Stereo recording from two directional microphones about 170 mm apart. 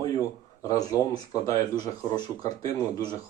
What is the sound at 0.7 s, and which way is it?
Speech, 20° left (ahead or behind).